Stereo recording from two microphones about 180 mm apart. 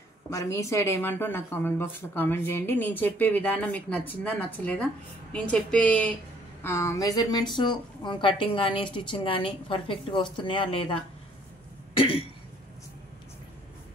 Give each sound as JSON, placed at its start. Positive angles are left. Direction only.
{"t": 0.3, "sound": "speech", "side_deg": 20}